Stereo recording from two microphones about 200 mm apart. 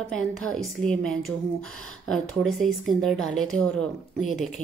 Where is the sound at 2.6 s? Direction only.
Centre (ahead or behind).